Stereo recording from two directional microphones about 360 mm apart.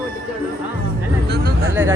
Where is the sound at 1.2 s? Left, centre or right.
Right.